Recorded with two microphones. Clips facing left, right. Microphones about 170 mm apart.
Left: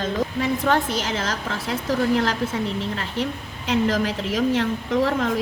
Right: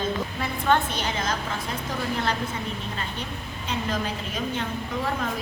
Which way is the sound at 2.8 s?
85° left.